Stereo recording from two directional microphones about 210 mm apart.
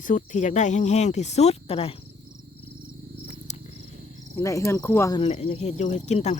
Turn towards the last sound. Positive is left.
turn(degrees=30)  # may be behind; listen again after turning